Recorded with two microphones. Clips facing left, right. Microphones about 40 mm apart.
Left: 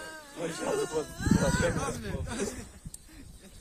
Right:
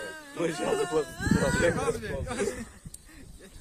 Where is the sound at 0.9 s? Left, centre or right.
Right.